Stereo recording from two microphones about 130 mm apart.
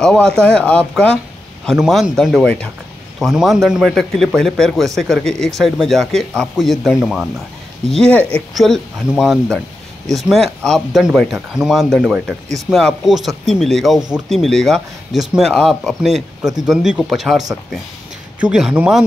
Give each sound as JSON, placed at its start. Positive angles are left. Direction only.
{"t": 0.0, "sound": "speech", "side_deg": 5}
{"t": 7.9, "sound": "speech", "side_deg": 5}
{"t": 12.0, "sound": "speech", "side_deg": -10}